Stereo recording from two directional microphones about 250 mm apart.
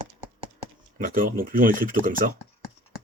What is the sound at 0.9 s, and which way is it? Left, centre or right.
Speech, right.